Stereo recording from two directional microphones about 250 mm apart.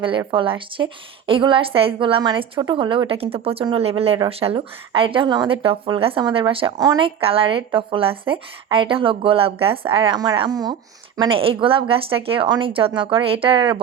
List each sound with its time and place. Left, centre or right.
0.0 s a woman's voice: centre